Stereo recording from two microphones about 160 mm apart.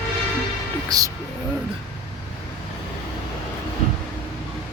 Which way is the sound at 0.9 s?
25° right (ahead or behind).